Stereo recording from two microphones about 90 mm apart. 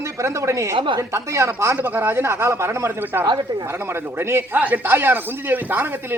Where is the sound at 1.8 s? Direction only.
20° right (ahead or behind).